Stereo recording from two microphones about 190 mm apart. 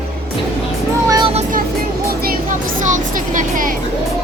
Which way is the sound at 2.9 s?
40° right (ahead or behind).